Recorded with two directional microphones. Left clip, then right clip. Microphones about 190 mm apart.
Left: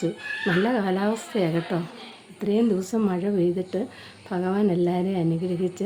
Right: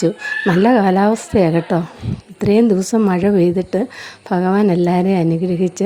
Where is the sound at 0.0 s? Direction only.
40° right (ahead or behind).